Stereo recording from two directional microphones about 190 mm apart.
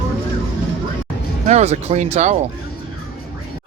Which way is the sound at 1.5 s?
35° right (ahead or behind).